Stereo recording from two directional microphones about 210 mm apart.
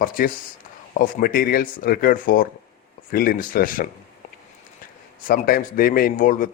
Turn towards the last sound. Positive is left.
turn(degrees=40)  # may be behind; listen again after turning